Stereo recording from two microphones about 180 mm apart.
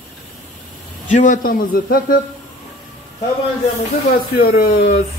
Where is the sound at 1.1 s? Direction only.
45° left (ahead or behind).